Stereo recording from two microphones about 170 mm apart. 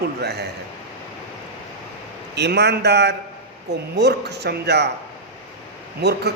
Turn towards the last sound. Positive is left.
turn(degrees=-75)  # may be behind; listen again after turning